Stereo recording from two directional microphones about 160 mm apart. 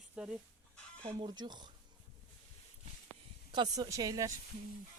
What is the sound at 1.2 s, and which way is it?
Speech, 25° right (ahead or behind).